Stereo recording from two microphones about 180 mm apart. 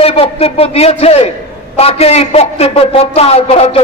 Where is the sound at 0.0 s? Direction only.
35° left (ahead or behind).